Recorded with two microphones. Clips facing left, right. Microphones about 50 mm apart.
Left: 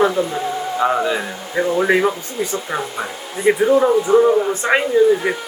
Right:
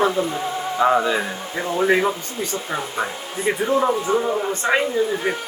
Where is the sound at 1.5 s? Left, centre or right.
Left.